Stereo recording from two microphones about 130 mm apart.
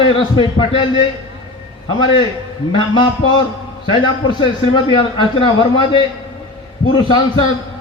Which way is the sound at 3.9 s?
35° left (ahead or behind).